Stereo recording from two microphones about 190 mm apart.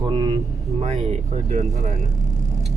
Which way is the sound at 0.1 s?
25° right (ahead or behind).